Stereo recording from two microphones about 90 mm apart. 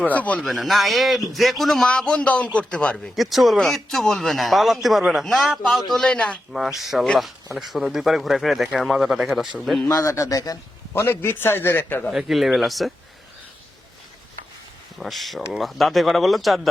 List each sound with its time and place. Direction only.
0.0 s speech: 15° left (ahead or behind)
0.4 s a man's voice: centre (ahead or behind)
3.2 s a man's voice: centre (ahead or behind)
6.5 s a man's voice: 5° right (ahead or behind)
9.9 s a man's voice: 35° left (ahead or behind)
10.9 s a man's voice: 25° left (ahead or behind)
12.1 s a man's voice: 5° right (ahead or behind)
14.9 s a man's voice: centre (ahead or behind)